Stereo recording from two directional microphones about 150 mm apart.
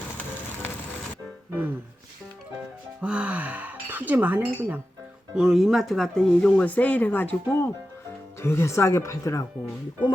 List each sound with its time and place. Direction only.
3.0 s music: 10° right (ahead or behind)
5.3 s speech: 5° right (ahead or behind); by 9.4 s 20° left (ahead or behind)